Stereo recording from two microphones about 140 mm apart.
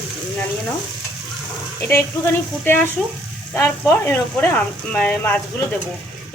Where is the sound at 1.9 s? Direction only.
15° left (ahead or behind).